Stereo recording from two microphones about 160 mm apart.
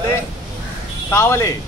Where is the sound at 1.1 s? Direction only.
15° left (ahead or behind).